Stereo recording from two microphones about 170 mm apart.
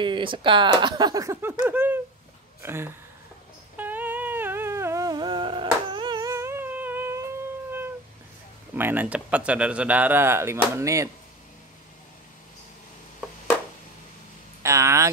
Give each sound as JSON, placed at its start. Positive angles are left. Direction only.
{"t": 0.0, "sound": "speech", "side_deg": -30}
{"t": 3.7, "sound": "a sound", "side_deg": -10}
{"t": 8.7, "sound": "speech", "side_deg": -10}
{"t": 14.6, "sound": "vehicle", "side_deg": -15}